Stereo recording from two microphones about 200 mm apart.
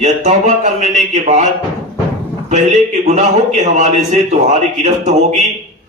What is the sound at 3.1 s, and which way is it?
A man's voice, 35° right (ahead or behind).